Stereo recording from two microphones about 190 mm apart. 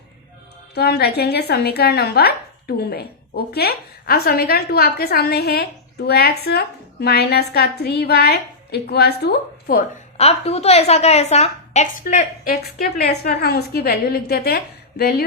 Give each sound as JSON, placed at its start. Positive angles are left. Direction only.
{"t": 0.7, "sound": "speech", "side_deg": 60}
{"t": 10.2, "sound": "a woman's voice", "side_deg": 35}